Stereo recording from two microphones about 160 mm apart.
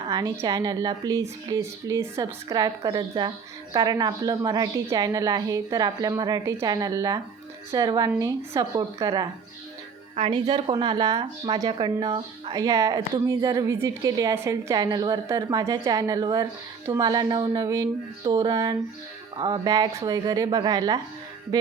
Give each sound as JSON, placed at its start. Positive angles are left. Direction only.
{"t": 0.1, "sound": "speech", "side_deg": -25}
{"t": 10.2, "sound": "speech", "side_deg": -35}